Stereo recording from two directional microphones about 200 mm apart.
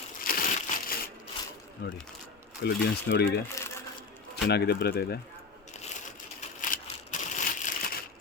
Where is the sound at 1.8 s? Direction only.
55° left (ahead or behind).